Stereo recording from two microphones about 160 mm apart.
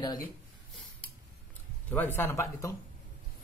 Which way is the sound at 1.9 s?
10° left (ahead or behind).